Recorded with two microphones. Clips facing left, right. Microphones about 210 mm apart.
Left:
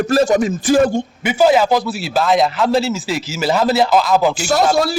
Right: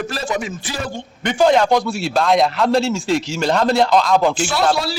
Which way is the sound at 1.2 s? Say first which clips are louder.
Left 1 dB; 5° left (ahead or behind).